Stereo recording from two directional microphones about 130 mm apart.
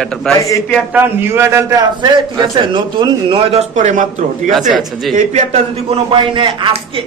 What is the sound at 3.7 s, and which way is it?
Speech, 70° right (ahead or behind).